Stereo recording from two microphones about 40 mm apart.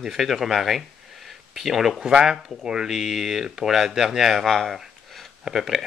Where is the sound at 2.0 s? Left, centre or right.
Centre.